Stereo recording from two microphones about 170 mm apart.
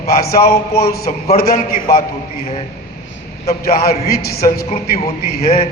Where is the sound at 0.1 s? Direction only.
60° left (ahead or behind).